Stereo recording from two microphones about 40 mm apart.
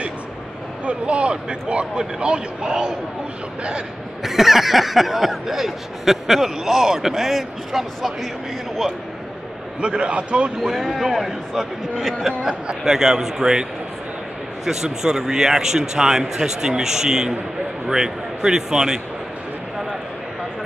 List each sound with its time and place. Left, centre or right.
0.8 s speech: right
4.2 s speech: centre
9.8 s speech: right
10.6 s a man's voice: centre
12.3 s a man's voice: centre